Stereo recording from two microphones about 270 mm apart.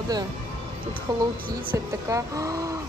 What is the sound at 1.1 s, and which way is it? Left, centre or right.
Speech, centre.